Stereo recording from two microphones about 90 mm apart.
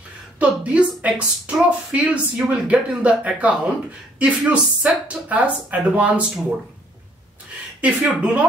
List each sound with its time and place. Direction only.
0.4 s speech: 15° right (ahead or behind)
7.8 s speech: 15° right (ahead or behind)